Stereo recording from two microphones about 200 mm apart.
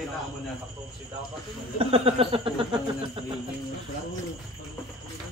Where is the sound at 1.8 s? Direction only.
30° right (ahead or behind).